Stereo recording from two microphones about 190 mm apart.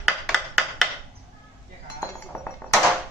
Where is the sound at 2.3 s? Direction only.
10° left (ahead or behind).